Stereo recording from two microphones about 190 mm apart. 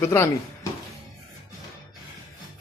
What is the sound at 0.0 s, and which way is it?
Speech, 15° left (ahead or behind).